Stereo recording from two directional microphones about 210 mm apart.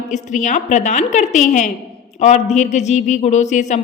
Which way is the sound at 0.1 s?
35° left (ahead or behind).